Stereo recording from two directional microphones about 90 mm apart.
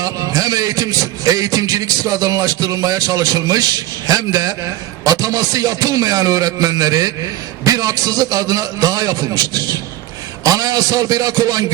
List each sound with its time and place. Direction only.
0.0 s a man's voice: 45° right (ahead or behind)
5.0 s music: 40° right (ahead or behind)
7.6 s a man's voice: 40° right (ahead or behind)